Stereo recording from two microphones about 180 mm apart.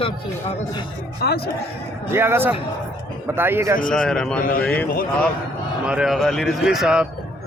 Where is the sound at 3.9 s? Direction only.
5° left (ahead or behind).